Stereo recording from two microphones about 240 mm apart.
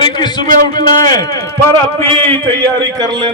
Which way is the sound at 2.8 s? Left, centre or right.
Centre.